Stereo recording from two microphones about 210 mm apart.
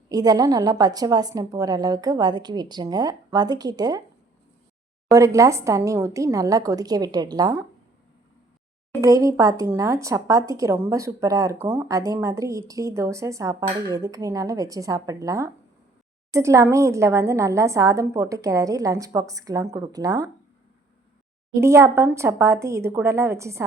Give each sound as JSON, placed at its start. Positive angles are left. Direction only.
{"t": 0.1, "sound": "speech", "side_deg": -20}
{"t": 5.1, "sound": "speech", "side_deg": -15}
{"t": 9.0, "sound": "speech", "side_deg": -15}
{"t": 21.5, "sound": "speech", "side_deg": -15}